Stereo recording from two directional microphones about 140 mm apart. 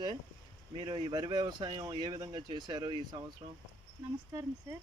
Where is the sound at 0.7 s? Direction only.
35° right (ahead or behind).